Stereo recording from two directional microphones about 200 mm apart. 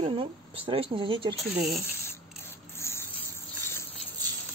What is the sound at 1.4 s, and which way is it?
Speech, centre (ahead or behind).